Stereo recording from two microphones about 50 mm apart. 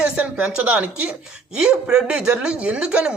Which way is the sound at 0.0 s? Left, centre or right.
Right.